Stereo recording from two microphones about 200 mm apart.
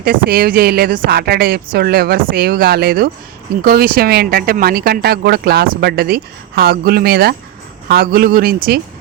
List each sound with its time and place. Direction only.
0.0 s speech: 50° right (ahead or behind)